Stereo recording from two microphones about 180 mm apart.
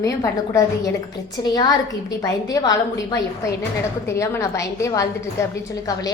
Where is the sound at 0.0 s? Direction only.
20° left (ahead or behind).